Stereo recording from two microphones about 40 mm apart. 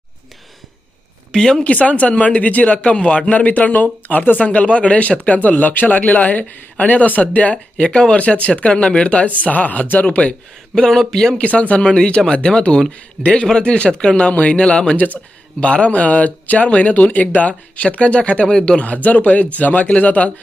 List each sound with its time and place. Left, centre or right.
1.3 s speech: centre
1.6 s a man's voice: left
7.5 s speech: left
8.1 s speech: left
9.4 s a man's voice: left
10.7 s speech: centre
11.3 s a man's voice: left
11.8 s speech: left
14.3 s a man's voice: left
14.6 s speech: left
14.9 s a man's voice: left
15.6 s a man's voice: left
19.0 s a man's voice: left